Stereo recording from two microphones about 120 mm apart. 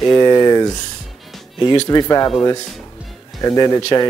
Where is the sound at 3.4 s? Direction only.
30° left (ahead or behind).